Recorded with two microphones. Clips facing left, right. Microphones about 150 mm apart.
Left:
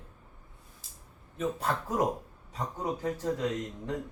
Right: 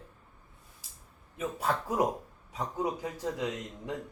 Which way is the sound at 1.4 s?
10° right (ahead or behind).